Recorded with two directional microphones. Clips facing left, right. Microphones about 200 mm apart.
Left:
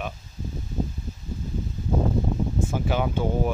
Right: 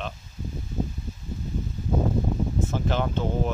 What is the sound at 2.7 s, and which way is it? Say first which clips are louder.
Speech: left 1 dB; 10° left (ahead or behind).